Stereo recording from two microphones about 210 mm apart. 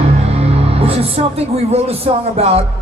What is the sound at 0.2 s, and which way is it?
Music, 30° right (ahead or behind).